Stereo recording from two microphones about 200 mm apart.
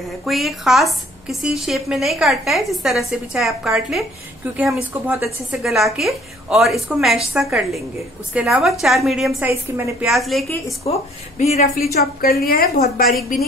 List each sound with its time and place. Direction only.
0.2 s a woman's voice: centre (ahead or behind)
10.9 s a woman's voice: 35° left (ahead or behind)
11.9 s a woman's voice: 50° left (ahead or behind)